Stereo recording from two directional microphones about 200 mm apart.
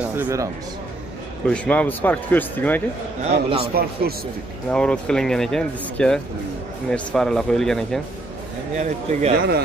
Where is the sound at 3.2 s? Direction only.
30° right (ahead or behind).